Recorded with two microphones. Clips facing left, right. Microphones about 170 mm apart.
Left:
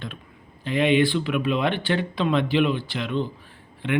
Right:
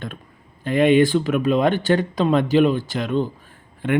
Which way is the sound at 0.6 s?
50° right (ahead or behind).